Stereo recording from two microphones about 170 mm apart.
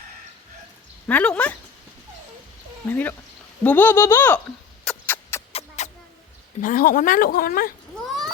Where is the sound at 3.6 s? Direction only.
10° left (ahead or behind).